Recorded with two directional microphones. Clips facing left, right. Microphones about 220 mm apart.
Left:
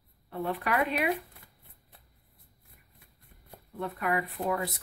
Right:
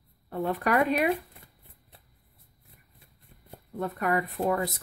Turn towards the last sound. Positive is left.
turn(degrees=-45)  # may be behind; listen again after turning